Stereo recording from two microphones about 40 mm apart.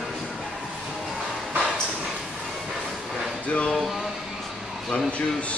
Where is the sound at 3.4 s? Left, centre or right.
Left.